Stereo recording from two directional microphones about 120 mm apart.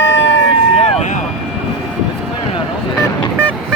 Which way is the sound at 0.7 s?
65° left (ahead or behind).